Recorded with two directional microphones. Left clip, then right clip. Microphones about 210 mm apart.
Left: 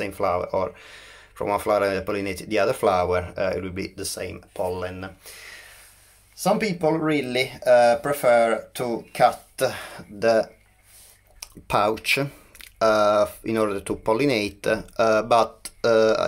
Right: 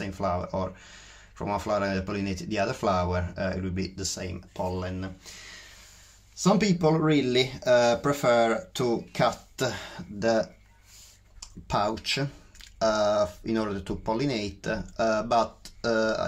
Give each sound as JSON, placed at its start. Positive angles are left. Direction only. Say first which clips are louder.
{"t": 0.0, "sound": "speech", "louder": "left 6 dB", "side_deg": 20}
{"t": 11.3, "sound": "speech", "louder": "left 5 dB", "side_deg": 25}